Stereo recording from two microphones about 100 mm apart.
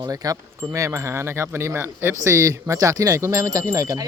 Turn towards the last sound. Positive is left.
turn(degrees=-35)  # may be behind; listen again after turning